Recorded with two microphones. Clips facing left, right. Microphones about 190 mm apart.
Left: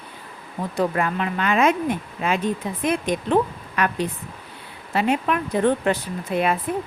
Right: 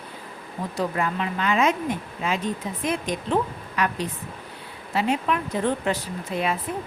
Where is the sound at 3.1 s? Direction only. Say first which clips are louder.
Left 4 dB; 55° left (ahead or behind).